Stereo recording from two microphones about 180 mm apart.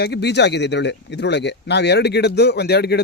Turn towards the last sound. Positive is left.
turn(degrees=65)  # may be behind; listen again after turning